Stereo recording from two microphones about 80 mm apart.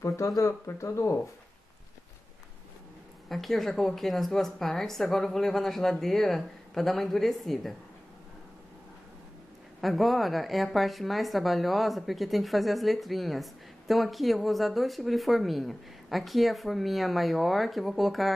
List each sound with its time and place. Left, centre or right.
0.0 s speech: left
3.3 s a woman's voice: centre
9.8 s a woman's voice: centre